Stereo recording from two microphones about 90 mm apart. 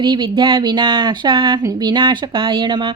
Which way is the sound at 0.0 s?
55° right (ahead or behind).